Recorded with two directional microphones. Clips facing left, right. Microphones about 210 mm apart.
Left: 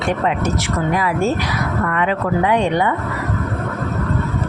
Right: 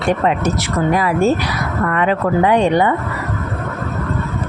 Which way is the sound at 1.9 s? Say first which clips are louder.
Right 5 dB; 40° right (ahead or behind).